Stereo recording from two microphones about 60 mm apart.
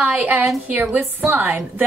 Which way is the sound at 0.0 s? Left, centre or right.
Right.